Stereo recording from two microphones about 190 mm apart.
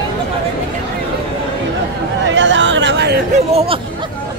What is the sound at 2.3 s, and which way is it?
Chatter, 75° right (ahead or behind).